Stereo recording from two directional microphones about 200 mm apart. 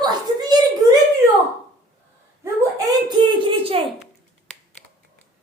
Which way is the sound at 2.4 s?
20° right (ahead or behind).